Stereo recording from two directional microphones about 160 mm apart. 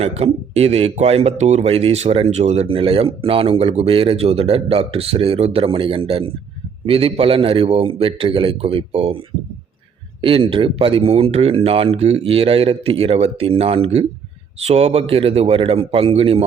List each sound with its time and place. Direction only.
0.0 s speech: 40° right (ahead or behind)
10.2 s speech: 35° right (ahead or behind)